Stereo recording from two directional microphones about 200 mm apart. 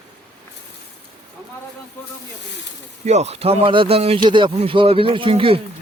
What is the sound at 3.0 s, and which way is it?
Speech, 35° right (ahead or behind).